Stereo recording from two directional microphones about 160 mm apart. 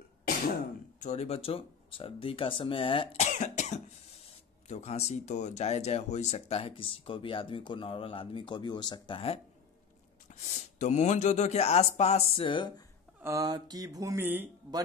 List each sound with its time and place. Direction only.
0.9 s speech: 45° left (ahead or behind)
3.3 s cough: 50° left (ahead or behind)
4.6 s speech: 45° left (ahead or behind)
10.3 s speech: 45° left (ahead or behind)
13.2 s speech: 20° right (ahead or behind)